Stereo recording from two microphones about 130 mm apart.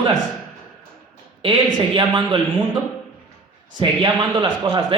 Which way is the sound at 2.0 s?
35° right (ahead or behind).